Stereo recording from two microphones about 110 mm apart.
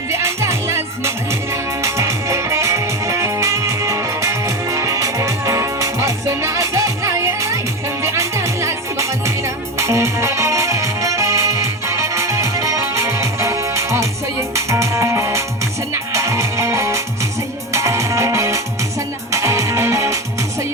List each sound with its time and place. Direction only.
0.1 s music: 25° right (ahead or behind)